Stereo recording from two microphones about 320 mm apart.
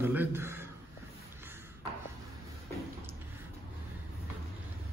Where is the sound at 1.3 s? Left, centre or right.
Centre.